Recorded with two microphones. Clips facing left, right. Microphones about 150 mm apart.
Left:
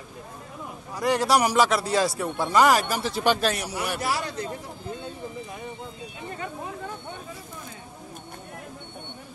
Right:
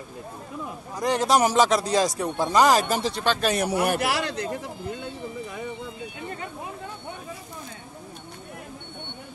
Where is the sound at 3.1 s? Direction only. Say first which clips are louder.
Left 2 dB; 15° left (ahead or behind).